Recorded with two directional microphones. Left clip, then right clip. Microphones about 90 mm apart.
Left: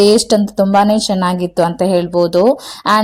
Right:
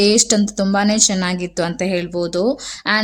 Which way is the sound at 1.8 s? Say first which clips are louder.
Left 8 dB; 40° left (ahead or behind).